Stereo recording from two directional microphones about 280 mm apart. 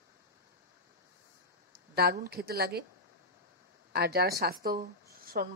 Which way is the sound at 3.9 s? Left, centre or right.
Right.